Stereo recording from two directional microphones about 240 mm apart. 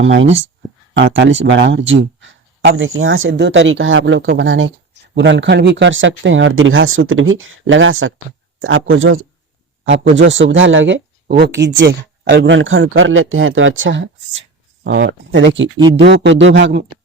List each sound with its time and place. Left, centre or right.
0.0 s speech: right